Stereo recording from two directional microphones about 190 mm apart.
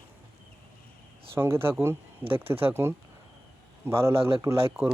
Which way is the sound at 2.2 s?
30° right (ahead or behind).